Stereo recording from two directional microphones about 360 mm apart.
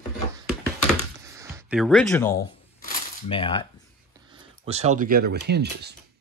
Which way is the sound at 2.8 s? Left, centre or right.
Centre.